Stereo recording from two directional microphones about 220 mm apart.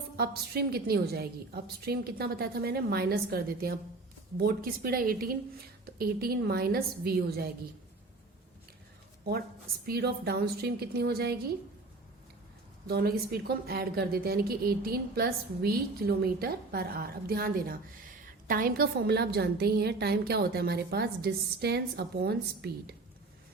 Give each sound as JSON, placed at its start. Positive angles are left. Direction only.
{"t": 0.2, "sound": "a woman's voice", "side_deg": -45}
{"t": 9.8, "sound": "a woman's voice", "side_deg": -45}
{"t": 12.9, "sound": "a woman's voice", "side_deg": -45}